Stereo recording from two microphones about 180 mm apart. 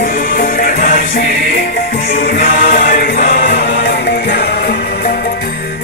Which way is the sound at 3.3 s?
60° left (ahead or behind).